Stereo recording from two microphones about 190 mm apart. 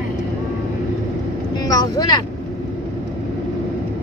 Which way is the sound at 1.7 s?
20° left (ahead or behind).